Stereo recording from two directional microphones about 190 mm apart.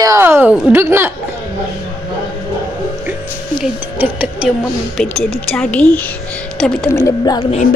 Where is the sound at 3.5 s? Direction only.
5° right (ahead or behind).